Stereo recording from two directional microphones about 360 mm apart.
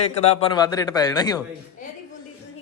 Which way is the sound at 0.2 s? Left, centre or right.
Centre.